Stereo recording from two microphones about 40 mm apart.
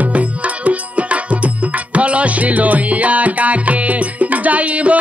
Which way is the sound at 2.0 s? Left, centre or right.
Right.